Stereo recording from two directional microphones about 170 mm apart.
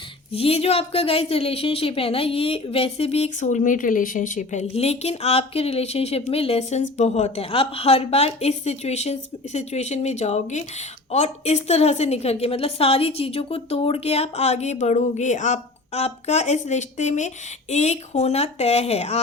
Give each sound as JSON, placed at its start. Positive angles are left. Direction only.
{"t": 0.3, "sound": "a woman's voice", "side_deg": 35}
{"t": 4.7, "sound": "a woman's voice", "side_deg": 40}